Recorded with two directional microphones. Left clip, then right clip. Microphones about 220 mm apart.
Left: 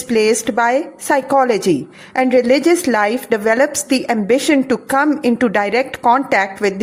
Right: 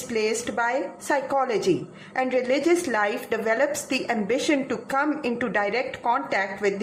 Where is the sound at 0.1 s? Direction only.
35° left (ahead or behind).